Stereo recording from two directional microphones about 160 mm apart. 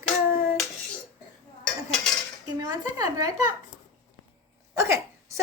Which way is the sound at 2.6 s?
25° right (ahead or behind).